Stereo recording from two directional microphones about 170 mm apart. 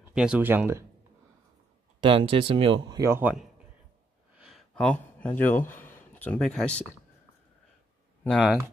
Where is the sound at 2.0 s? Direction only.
30° right (ahead or behind).